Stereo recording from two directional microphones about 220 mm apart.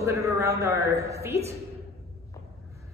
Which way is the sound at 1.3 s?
30° right (ahead or behind).